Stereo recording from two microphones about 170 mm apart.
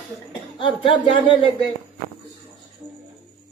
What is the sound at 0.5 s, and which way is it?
A woman's voice, 30° left (ahead or behind).